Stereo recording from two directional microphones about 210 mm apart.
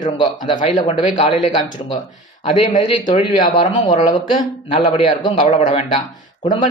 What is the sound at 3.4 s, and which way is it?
Speech, 20° left (ahead or behind).